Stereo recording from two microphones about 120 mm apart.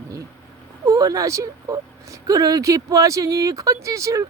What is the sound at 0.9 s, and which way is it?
Speech, 30° right (ahead or behind).